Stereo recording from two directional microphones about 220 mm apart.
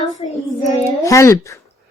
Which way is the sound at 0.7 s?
15° left (ahead or behind).